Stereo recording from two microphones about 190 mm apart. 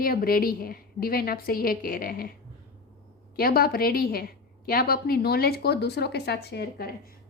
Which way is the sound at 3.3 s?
50° left (ahead or behind).